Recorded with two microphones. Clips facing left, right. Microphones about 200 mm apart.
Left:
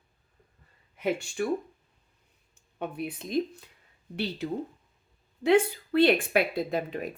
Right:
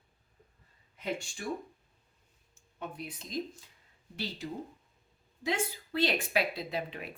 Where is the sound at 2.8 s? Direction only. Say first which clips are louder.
Left 8 dB; 60° left (ahead or behind).